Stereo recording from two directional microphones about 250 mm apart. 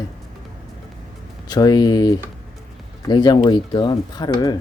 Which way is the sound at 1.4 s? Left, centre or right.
Centre.